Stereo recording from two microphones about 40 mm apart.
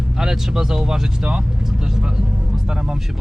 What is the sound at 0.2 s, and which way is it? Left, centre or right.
Speech, centre.